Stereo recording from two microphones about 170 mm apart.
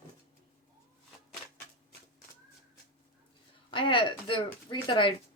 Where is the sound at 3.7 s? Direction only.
30° left (ahead or behind).